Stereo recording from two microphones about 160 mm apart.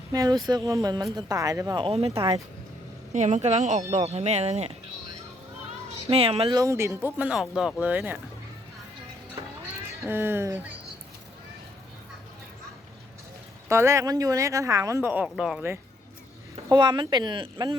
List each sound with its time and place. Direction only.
0.1 s speech: 25° right (ahead or behind)
3.1 s speech: 50° right (ahead or behind)
6.1 s speech: 40° right (ahead or behind)
6.6 s speech: 20° right (ahead or behind)
9.9 s speech: 15° right (ahead or behind)
13.7 s speech: 15° right (ahead or behind)
16.6 s speech: 25° right (ahead or behind)